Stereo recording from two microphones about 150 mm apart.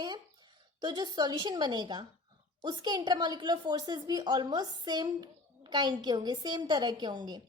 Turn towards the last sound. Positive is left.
turn(degrees=-30)  # may be behind; listen again after turning